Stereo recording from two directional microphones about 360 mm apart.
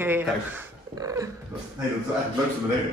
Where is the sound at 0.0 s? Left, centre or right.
Centre.